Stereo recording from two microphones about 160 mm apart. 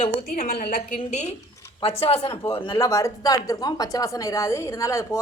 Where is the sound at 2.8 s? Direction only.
20° left (ahead or behind).